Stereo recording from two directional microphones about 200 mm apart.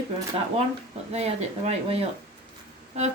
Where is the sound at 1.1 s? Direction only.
30° right (ahead or behind).